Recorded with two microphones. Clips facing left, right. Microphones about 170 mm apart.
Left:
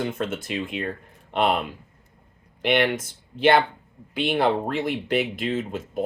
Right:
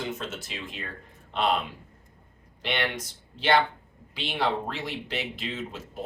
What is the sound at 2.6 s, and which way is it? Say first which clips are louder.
Speech: left 9 dB; 55° left (ahead or behind).